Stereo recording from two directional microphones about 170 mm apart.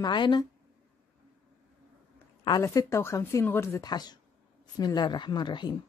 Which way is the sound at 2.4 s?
25° left (ahead or behind).